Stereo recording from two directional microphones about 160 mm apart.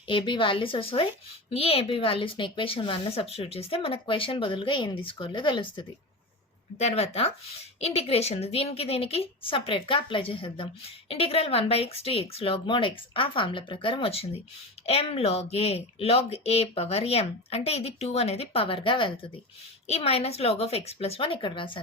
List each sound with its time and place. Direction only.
0.1 s a woman's voice: 30° left (ahead or behind)
6.7 s a woman's voice: 40° left (ahead or behind)